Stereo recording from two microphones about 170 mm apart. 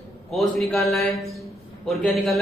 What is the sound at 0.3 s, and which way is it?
A man's voice, centre (ahead or behind).